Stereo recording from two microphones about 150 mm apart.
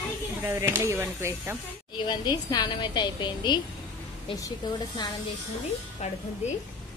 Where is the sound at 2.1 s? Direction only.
30° left (ahead or behind).